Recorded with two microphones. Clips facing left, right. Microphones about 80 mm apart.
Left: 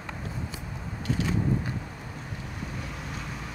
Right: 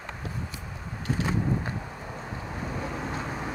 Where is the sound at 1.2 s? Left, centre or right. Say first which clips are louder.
Even; right.